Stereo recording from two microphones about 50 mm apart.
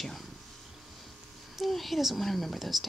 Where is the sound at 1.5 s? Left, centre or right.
Centre.